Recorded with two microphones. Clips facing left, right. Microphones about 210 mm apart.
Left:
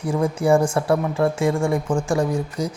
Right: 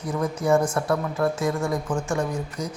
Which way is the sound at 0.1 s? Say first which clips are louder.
Left 4 dB; 30° left (ahead or behind).